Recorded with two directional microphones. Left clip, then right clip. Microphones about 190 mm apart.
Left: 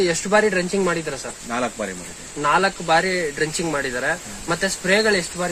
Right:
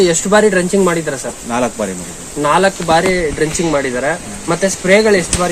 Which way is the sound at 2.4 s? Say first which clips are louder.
Right 6 dB; 15° left (ahead or behind).